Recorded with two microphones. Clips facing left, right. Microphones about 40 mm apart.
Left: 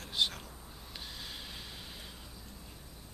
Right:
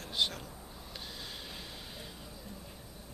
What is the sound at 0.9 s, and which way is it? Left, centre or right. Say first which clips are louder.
Snort: even; centre.